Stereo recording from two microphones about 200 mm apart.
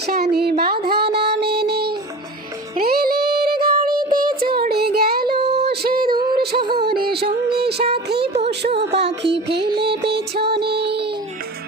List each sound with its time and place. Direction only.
0.0 s a sound: 55° right (ahead or behind)
0.6 s music: 50° right (ahead or behind)
2.7 s child singing: 50° right (ahead or behind)
5.4 s a sound: 55° right (ahead or behind)
6.4 s music: 55° right (ahead or behind)
9.7 s music: 25° right (ahead or behind)
10.0 s music: 55° right (ahead or behind)